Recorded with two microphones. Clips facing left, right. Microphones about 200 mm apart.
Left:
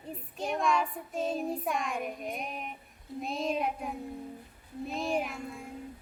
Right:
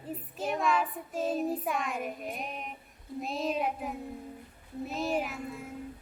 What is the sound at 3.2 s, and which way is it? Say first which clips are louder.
A child's voice: even; centre (ahead or behind).